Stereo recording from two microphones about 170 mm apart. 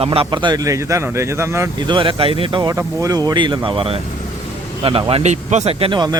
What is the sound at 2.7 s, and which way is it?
A man's voice, 20° right (ahead or behind).